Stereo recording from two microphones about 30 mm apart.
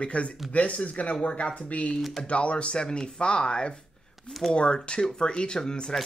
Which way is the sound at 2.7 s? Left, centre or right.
Left.